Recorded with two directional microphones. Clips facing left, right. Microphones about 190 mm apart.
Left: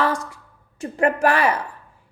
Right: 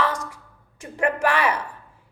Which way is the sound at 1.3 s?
35° left (ahead or behind).